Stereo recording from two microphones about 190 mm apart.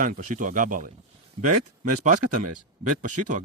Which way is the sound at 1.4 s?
30° right (ahead or behind).